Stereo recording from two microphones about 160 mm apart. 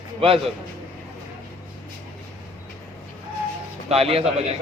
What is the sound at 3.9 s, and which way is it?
Speech, 35° right (ahead or behind).